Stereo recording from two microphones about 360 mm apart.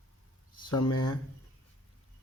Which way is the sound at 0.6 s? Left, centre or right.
Centre.